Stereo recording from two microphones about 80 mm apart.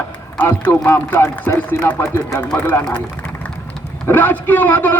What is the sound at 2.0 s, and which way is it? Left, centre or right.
Speech, left.